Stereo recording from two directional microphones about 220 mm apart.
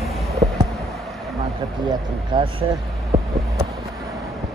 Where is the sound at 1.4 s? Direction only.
20° right (ahead or behind).